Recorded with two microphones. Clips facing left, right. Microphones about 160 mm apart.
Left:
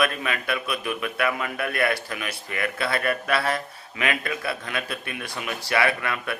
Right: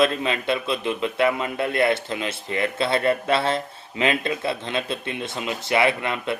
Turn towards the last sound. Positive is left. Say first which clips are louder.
# right 3 dB
turn(degrees=-20)  # may be behind; listen again after turning